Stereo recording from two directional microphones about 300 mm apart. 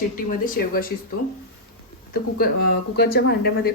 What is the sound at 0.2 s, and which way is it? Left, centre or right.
Speech, left.